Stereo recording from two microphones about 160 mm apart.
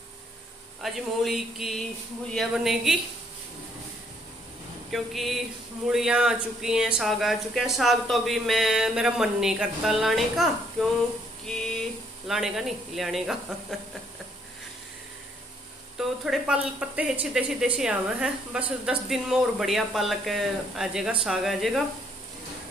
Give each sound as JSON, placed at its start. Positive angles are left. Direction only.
{"t": 0.8, "sound": "speech", "side_deg": 0}
{"t": 4.9, "sound": "speech", "side_deg": 0}
{"t": 16.0, "sound": "speech", "side_deg": -5}